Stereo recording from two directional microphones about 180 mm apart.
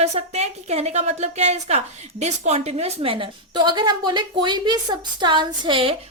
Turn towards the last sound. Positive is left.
turn(degrees=-30)  # may be behind; listen again after turning